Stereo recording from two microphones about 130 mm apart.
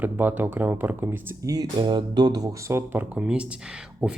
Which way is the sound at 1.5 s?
30° right (ahead or behind).